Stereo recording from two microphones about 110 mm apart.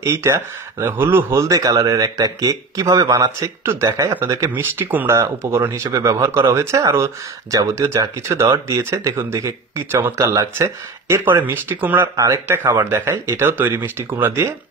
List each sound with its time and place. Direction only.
0.0 s speech: 25° right (ahead or behind)
12.2 s speech: 30° right (ahead or behind)